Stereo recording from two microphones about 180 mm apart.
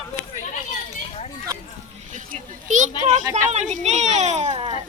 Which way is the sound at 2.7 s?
45° right (ahead or behind).